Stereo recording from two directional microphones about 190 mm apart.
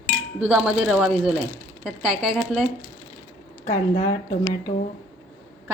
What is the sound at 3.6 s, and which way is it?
Speech, 35° left (ahead or behind).